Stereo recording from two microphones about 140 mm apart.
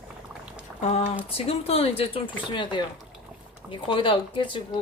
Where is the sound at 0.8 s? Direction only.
50° left (ahead or behind).